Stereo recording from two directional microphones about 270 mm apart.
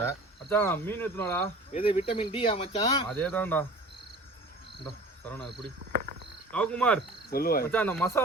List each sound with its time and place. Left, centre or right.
0.5 s speech: centre
1.7 s speech: left
3.1 s speech: centre
5.2 s cricket: centre
5.9 s cricket: right
6.5 s cricket: centre
7.3 s cricket: left
7.7 s speech: centre